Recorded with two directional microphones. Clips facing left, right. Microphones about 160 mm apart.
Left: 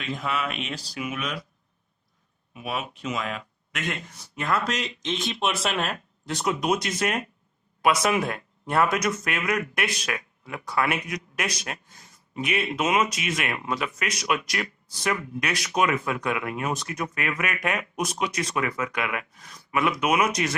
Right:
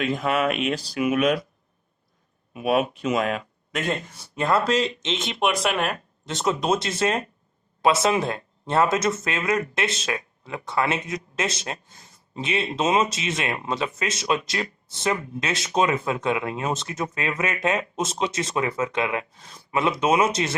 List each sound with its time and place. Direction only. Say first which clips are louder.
0.0 s speech: right 7 dB; 50° right (ahead or behind)
2.5 s speech: right 10 dB; 55° right (ahead or behind)
3.7 s speech: right 6 dB; 30° right (ahead or behind)